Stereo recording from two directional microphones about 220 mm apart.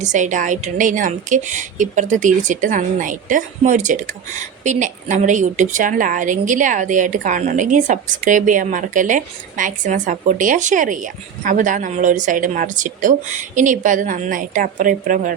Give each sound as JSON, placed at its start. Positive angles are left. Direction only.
{"t": 0.0, "sound": "a woman's voice", "side_deg": -35}